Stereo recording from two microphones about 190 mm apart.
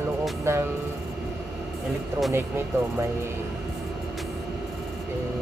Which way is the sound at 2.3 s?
10° right (ahead or behind).